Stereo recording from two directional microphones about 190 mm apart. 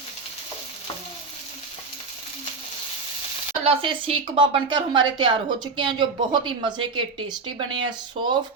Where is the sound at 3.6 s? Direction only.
30° right (ahead or behind).